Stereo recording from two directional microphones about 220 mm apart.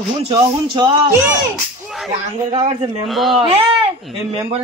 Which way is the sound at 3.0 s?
Centre (ahead or behind).